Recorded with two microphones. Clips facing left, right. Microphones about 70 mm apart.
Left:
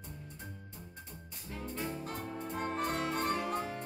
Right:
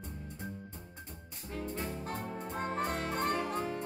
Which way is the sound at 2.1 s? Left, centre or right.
Right.